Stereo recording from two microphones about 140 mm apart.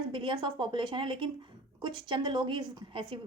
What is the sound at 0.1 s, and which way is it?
A woman's voice, 35° right (ahead or behind).